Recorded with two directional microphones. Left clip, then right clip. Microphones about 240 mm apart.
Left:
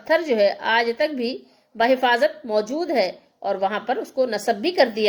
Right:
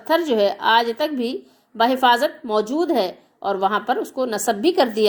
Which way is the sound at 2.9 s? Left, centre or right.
Right.